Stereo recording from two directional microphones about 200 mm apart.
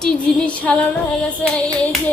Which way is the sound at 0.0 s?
5° left (ahead or behind).